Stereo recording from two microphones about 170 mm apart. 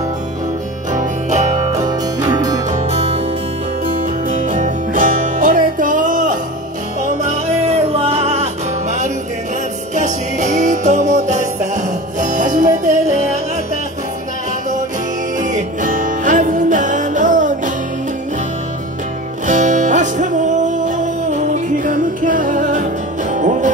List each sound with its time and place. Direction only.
1.3 s music: 45° right (ahead or behind)
1.8 s music: 20° right (ahead or behind)
2.7 s music: 35° right (ahead or behind)
3.8 s music: 50° right (ahead or behind)
9.9 s music: 45° right (ahead or behind)
15.3 s music: 50° right (ahead or behind)
19.4 s music: 45° right (ahead or behind)